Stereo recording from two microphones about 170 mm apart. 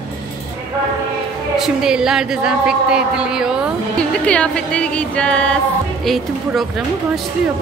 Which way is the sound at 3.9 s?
5° left (ahead or behind).